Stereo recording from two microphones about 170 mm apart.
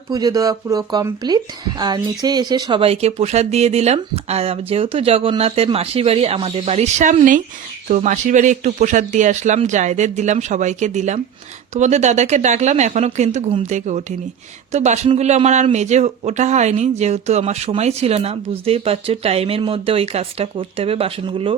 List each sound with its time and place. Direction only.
0.1 s speech: 20° right (ahead or behind)